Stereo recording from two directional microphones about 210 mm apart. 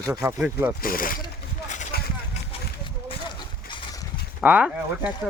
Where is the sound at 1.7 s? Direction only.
35° left (ahead or behind).